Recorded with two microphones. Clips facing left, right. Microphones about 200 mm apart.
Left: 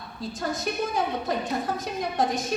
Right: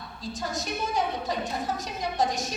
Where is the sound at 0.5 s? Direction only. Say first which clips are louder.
Left 1 dB; 55° left (ahead or behind).